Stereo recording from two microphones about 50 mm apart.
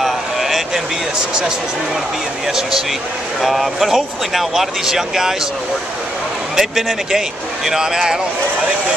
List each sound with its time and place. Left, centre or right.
0.0 s a sound: centre
1.1 s speech: centre
6.5 s speech: centre